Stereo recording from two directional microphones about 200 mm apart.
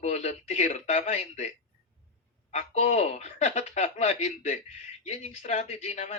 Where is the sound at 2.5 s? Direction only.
35° left (ahead or behind).